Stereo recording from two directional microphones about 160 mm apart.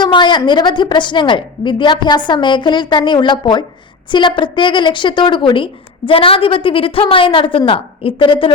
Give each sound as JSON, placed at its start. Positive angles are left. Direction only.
{"t": 0.0, "sound": "a woman's voice", "side_deg": 30}